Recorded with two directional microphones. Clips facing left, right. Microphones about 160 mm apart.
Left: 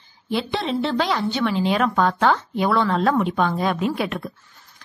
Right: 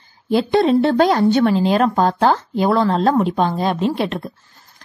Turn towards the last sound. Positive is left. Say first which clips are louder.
# right 4 dB
turn(degrees=-30)  # may be behind; listen again after turning